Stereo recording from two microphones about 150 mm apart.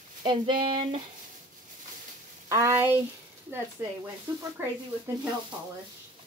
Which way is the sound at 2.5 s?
20° right (ahead or behind).